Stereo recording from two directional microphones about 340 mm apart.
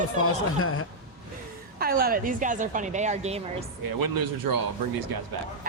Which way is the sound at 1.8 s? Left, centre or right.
Right.